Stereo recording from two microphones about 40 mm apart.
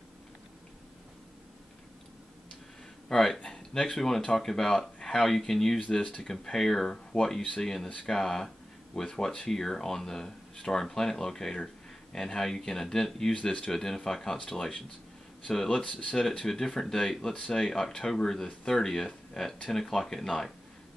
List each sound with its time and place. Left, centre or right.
3.1 s speech: centre
13.4 s speech: left
13.7 s speech: centre
15.8 s speech: left
16.2 s speech: centre